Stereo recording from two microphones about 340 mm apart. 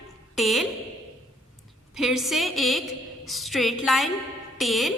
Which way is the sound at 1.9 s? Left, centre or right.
Centre.